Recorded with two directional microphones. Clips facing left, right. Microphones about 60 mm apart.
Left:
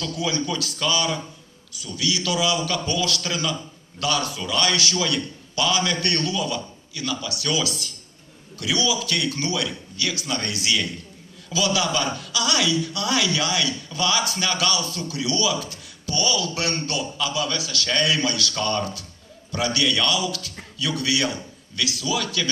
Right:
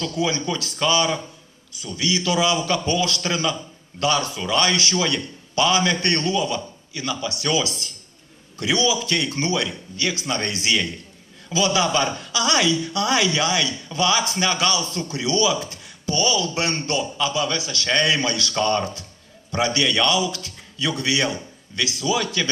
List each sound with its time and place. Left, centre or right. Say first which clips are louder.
0.0 s a woman's voice: right 2 dB; right